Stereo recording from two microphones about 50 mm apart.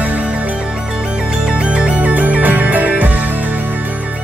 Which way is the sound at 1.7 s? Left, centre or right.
Right.